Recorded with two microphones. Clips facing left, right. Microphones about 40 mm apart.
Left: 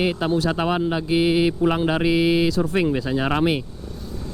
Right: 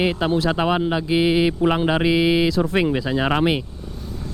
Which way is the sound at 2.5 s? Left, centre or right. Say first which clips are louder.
Right 1 dB; right.